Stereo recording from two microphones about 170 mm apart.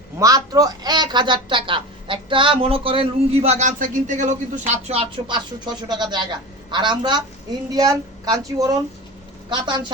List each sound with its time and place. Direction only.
0.2 s speech: 20° right (ahead or behind)